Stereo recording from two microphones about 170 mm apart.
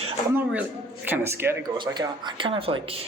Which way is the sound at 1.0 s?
10° right (ahead or behind).